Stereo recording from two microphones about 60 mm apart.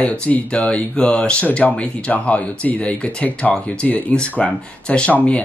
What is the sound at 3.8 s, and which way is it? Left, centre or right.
Speech, left.